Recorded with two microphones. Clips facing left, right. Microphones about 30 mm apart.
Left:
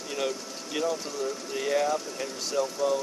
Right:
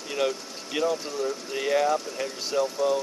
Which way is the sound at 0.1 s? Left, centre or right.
Centre.